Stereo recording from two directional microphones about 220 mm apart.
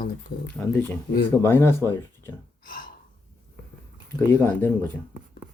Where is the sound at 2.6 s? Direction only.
40° left (ahead or behind).